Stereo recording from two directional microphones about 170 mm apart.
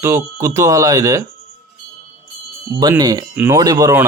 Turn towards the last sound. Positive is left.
turn(degrees=-20)  # may be behind; listen again after turning